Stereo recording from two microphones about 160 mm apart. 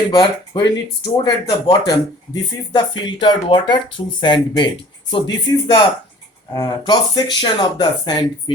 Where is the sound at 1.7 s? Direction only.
25° left (ahead or behind).